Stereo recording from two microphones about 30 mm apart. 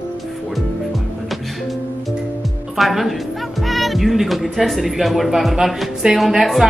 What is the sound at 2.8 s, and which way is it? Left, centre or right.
Speech, centre.